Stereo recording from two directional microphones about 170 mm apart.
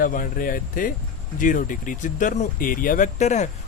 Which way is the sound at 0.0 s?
55° left (ahead or behind).